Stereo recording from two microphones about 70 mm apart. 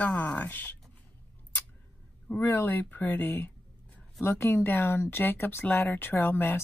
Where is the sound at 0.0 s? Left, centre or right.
Left.